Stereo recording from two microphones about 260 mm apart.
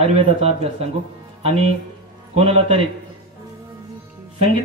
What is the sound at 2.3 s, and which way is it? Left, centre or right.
Speech, right.